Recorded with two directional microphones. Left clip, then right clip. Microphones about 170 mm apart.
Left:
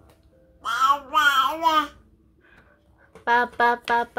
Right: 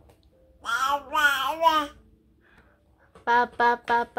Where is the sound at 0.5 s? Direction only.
10° right (ahead or behind).